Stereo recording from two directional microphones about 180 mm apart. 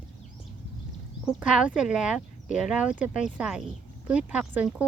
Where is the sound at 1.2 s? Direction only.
5° right (ahead or behind).